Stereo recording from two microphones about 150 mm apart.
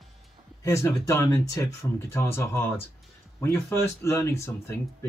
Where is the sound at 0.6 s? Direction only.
20° left (ahead or behind).